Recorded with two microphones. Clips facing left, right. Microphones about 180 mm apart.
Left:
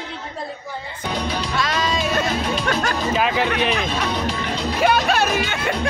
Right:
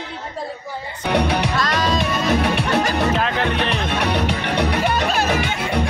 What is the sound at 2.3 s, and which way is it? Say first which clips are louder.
Speech: right 4 dB; 70° right (ahead or behind).